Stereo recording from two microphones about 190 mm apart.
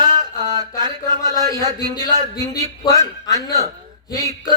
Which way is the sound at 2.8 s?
15° left (ahead or behind).